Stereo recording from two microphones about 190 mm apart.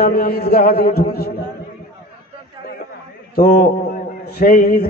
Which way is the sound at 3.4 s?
50° left (ahead or behind).